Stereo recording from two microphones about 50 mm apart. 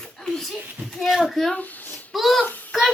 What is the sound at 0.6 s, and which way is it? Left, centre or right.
Speech, right.